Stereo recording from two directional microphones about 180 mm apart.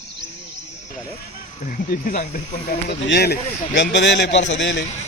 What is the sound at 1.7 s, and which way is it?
Speech, 50° left (ahead or behind).